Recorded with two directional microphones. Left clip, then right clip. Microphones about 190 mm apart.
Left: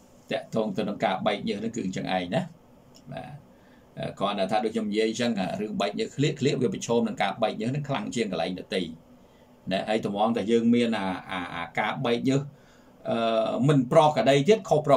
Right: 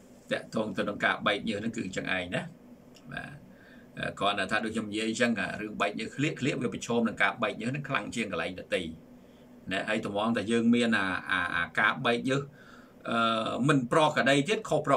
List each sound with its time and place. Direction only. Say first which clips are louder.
0.3 s speech: left 4 dB; 15° left (ahead or behind)
3.9 s speech: even; 15° left (ahead or behind)